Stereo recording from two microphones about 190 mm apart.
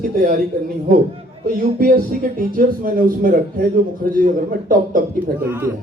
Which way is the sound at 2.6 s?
45° right (ahead or behind).